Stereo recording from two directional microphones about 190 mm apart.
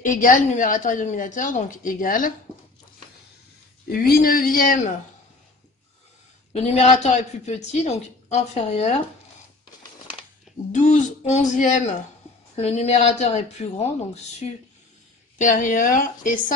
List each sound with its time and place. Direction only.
0.0 s a woman's voice: 45° left (ahead or behind)
3.9 s a woman's voice: 50° left (ahead or behind)
6.5 s a woman's voice: 35° left (ahead or behind)
10.7 s a woman's voice: 40° left (ahead or behind)
15.3 s a woman's voice: 40° left (ahead or behind)